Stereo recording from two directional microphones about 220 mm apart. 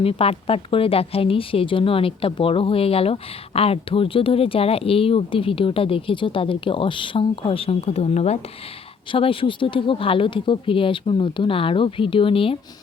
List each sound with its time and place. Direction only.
0.0 s a woman's voice: 25° left (ahead or behind)